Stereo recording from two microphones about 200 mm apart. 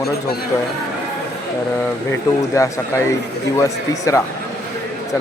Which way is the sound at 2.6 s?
15° left (ahead or behind).